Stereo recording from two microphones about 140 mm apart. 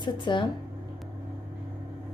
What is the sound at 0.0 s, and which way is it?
Speech, 35° left (ahead or behind).